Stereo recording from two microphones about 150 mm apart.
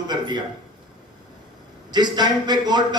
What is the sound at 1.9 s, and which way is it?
A man's voice, 30° right (ahead or behind).